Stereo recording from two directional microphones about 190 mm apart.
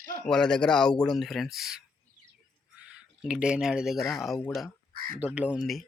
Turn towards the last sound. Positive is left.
turn(degrees=-5)  # may be behind; listen again after turning